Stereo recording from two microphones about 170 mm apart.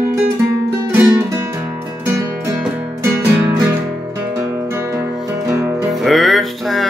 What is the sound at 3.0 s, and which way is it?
Music, 15° right (ahead or behind).